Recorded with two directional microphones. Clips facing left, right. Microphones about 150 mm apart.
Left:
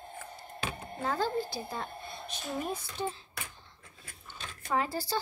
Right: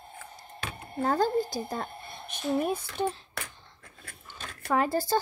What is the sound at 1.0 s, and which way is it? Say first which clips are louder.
A woman's voice: right 6 dB; 45° right (ahead or behind).